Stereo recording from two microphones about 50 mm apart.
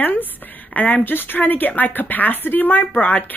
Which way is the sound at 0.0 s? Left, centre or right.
Left.